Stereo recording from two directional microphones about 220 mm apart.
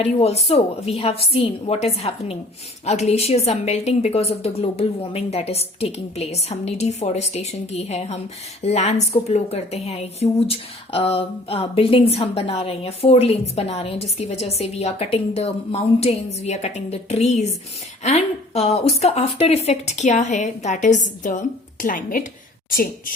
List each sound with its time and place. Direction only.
0.0 s a woman's voice: 30° left (ahead or behind)